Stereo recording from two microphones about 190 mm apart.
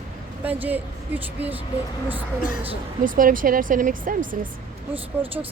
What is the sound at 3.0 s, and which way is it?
Speech, 45° right (ahead or behind).